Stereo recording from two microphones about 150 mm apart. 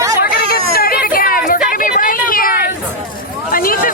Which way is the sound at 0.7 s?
85° left.